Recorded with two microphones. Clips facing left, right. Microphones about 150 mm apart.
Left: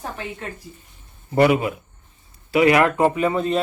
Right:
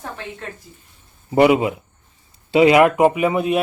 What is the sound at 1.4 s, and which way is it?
A man's voice, 20° right (ahead or behind).